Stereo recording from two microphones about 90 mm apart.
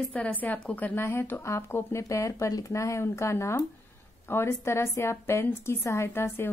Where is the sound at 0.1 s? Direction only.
15° left (ahead or behind).